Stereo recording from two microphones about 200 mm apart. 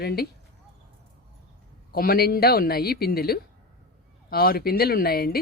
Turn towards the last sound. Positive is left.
turn(degrees=50)  # may be behind; listen again after turning